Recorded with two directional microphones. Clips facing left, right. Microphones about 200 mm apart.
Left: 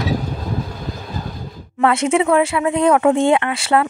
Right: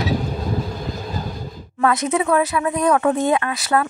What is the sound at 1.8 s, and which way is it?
Speech, 25° left (ahead or behind).